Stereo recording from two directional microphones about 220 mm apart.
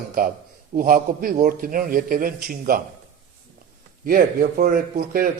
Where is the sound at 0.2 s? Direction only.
40° right (ahead or behind).